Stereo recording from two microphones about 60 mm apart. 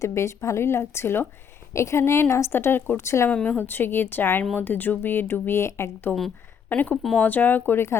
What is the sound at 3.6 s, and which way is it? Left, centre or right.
A woman's voice, left.